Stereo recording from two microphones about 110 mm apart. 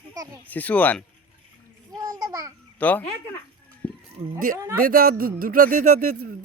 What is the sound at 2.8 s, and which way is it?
Speech, 15° left (ahead or behind).